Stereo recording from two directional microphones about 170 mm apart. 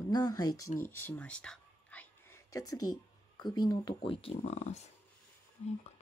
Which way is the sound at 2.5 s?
20° left (ahead or behind).